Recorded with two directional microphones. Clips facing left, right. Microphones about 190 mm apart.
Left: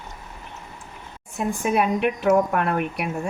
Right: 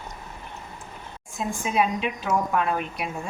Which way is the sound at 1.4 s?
60° left (ahead or behind).